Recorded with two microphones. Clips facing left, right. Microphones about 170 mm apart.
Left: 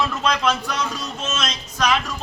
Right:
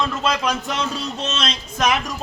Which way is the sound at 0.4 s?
20° right (ahead or behind).